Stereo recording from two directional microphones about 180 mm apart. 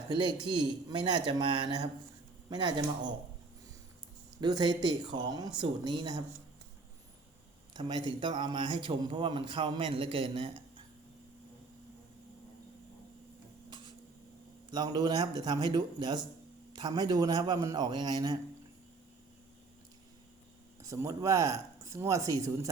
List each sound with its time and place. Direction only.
0.1 s speech: 25° right (ahead or behind)
4.4 s speech: 25° right (ahead or behind)
7.8 s speech: 25° right (ahead or behind)
13.7 s a sound: 25° right (ahead or behind)
14.7 s speech: 25° right (ahead or behind)
20.8 s speech: 15° right (ahead or behind)